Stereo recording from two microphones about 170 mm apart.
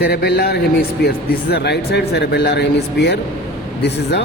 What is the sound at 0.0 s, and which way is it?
Speech, 70° left (ahead or behind).